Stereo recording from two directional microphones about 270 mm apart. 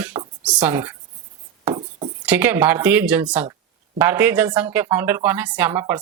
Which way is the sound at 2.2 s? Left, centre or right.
Centre.